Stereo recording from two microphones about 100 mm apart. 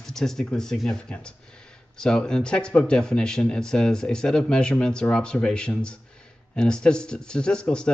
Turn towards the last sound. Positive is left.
turn(degrees=10)  # may be behind; listen again after turning